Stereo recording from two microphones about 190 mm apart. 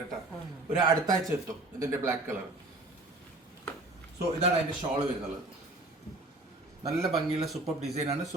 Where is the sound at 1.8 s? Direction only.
15° right (ahead or behind).